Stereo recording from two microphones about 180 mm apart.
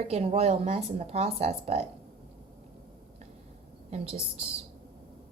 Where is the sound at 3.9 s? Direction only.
35° right (ahead or behind).